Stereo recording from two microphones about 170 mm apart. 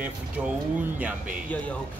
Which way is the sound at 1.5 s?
10° left (ahead or behind).